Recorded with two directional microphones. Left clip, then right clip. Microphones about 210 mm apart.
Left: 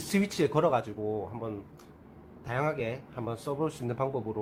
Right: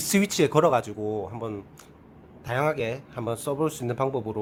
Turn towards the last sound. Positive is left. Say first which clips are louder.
# right 5 dB
turn(degrees=-30)  # may be behind; listen again after turning